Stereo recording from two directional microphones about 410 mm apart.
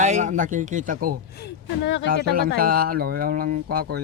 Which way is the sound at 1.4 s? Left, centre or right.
Left.